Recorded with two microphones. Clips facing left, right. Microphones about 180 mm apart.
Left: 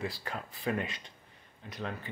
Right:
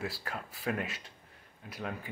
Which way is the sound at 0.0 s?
5° right (ahead or behind).